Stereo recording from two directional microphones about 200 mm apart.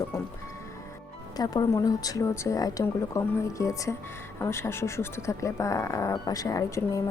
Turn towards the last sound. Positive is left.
turn(degrees=15)  # may be behind; listen again after turning